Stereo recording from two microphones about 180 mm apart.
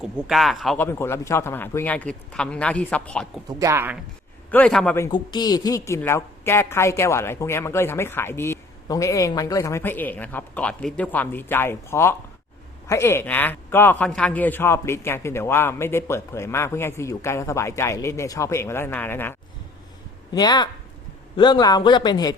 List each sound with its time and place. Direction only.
0.0 s speech: centre (ahead or behind)
0.8 s speech: 15° left (ahead or behind)
3.6 s speech: 15° right (ahead or behind)
4.5 s speech: 5° left (ahead or behind)
4.9 s a man's voice: 25° left (ahead or behind)